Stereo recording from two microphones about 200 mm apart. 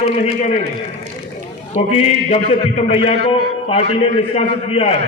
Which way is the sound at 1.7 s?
30° left (ahead or behind).